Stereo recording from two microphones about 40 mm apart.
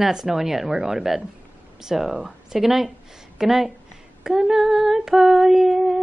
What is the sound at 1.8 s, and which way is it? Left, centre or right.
Female singing, centre.